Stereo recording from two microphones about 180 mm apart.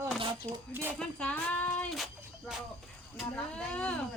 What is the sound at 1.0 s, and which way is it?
Speech, 5° left (ahead or behind).